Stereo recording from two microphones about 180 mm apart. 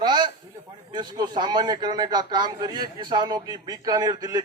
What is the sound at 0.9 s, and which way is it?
A man's voice, 25° right (ahead or behind).